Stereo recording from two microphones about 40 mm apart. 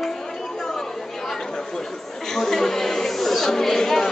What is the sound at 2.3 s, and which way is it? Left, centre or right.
Chatter, centre.